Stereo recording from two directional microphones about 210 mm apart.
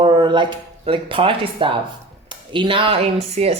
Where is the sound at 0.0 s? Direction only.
20° right (ahead or behind).